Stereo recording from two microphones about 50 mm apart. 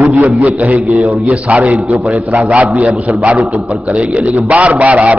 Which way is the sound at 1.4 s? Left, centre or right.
Right.